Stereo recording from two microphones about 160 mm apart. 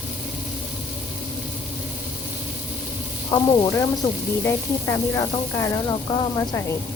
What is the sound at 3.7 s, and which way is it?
Speech, 15° left (ahead or behind).